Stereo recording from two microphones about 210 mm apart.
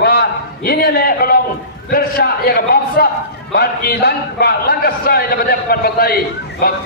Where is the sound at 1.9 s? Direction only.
45° left (ahead or behind).